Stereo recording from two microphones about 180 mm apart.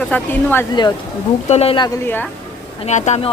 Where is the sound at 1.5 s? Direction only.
35° left (ahead or behind).